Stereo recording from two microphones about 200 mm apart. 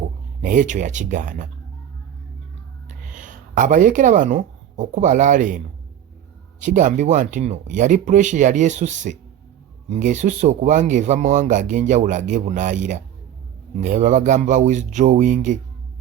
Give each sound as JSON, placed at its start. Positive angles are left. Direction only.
{"t": 0.4, "sound": "speech", "side_deg": -40}
{"t": 3.1, "sound": "speech", "side_deg": -40}